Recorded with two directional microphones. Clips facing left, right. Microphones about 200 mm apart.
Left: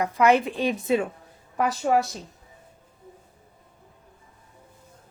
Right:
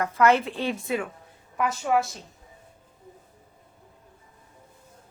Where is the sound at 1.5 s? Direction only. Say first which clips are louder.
Left 2 dB; 35° left (ahead or behind).